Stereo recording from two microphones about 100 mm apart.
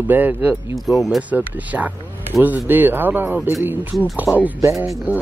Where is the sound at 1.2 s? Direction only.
15° right (ahead or behind).